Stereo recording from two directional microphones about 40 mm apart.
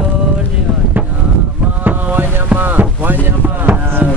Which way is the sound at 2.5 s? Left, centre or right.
Right.